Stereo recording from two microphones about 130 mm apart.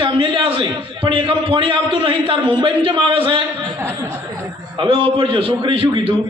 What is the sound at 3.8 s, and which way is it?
Speech, 20° right (ahead or behind).